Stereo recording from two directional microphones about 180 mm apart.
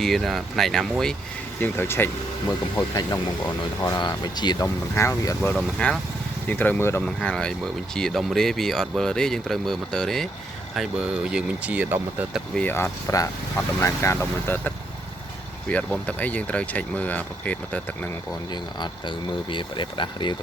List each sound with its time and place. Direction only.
0.0 s speech: centre (ahead or behind)
12.5 s speech: 10° left (ahead or behind)
15.7 s speech: 5° left (ahead or behind)
18.5 s speech: 25° left (ahead or behind)